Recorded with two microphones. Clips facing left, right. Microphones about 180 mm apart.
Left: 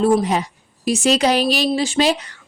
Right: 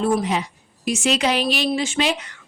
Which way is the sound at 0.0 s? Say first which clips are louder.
Left 4 dB; 40° left (ahead or behind).